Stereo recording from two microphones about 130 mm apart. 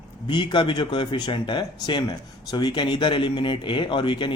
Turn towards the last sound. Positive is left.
turn(degrees=40)  # may be behind; listen again after turning